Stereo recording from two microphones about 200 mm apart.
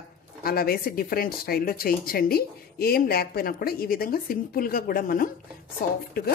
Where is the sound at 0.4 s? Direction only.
50° left (ahead or behind).